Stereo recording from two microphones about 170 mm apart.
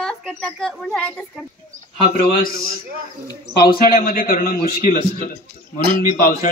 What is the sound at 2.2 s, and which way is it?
A man's voice, 60° left (ahead or behind).